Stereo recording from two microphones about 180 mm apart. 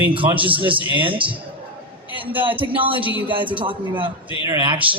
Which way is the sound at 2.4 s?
30° right (ahead or behind).